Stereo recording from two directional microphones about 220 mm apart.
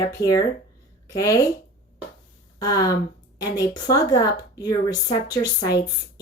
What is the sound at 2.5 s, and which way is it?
Speech, 15° left (ahead or behind).